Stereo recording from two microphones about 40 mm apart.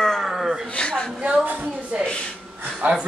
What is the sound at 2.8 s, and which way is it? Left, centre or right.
Speech, right.